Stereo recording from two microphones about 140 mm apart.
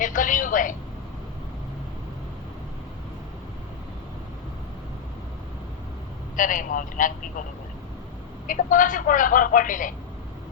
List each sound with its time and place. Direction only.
0.0 s a sound: 70° left (ahead or behind)
6.3 s speech: 70° left (ahead or behind)
8.4 s speech: 70° left (ahead or behind)